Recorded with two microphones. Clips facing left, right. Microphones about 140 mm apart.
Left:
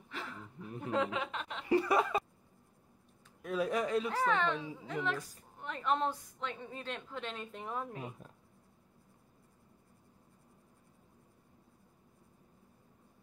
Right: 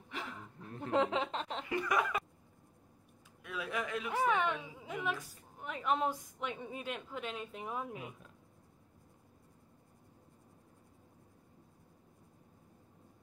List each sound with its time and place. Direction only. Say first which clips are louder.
0.1 s a sound: even; 15° right (ahead or behind)
0.6 s chuckle: left 2 dB; 10° left (ahead or behind)
0.9 s speech: right 3 dB; 25° right (ahead or behind)
1.7 s chuckle: left 5 dB; 30° left (ahead or behind)
3.4 s a sound: left 6 dB; 40° left (ahead or behind)
4.1 s a woman's voice: even; 15° right (ahead or behind)